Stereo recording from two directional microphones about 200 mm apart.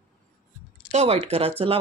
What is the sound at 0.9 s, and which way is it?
Speech, 35° right (ahead or behind).